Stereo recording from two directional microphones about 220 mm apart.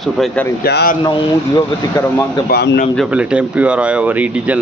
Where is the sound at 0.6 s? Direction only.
45° left (ahead or behind).